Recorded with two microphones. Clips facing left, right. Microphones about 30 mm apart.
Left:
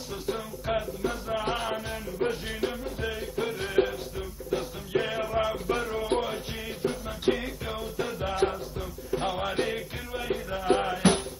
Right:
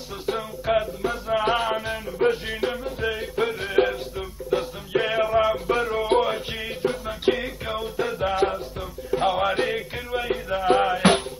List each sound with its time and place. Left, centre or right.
0.3 s a sound: right
0.7 s music: right
3.5 s music: centre
3.8 s music: right
11.0 s music: right